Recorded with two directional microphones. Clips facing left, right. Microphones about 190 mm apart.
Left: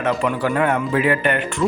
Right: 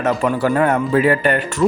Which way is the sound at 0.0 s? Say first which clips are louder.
Right 3 dB; 40° right (ahead or behind).